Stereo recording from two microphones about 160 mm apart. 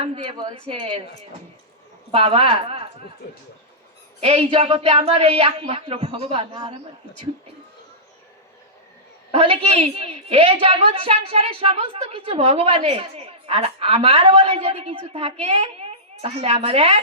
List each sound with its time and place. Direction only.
0.0 s a woman's voice: 35° right (ahead or behind)
4.2 s a woman's voice: 40° right (ahead or behind)
9.3 s a woman's voice: 35° right (ahead or behind)